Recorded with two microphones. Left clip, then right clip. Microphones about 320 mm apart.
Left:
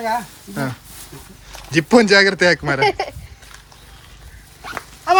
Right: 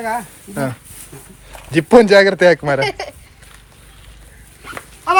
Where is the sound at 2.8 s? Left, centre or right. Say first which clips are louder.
Left 3 dB; left.